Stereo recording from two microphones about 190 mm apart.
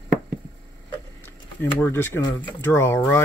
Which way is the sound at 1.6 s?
10° left (ahead or behind).